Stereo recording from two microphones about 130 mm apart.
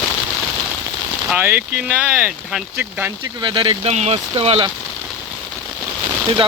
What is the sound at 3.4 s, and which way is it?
Speech, 40° right (ahead or behind).